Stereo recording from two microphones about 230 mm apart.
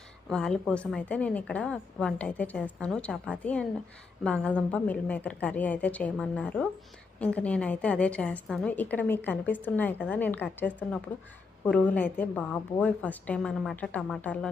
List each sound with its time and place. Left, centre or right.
0.3 s a woman's voice: centre